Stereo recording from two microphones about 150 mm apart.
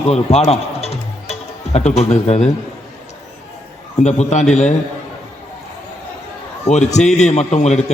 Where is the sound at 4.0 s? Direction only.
50° left (ahead or behind).